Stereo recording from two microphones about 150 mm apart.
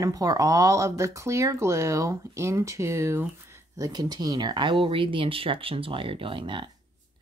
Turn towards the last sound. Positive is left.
turn(degrees=-35)  # may be behind; listen again after turning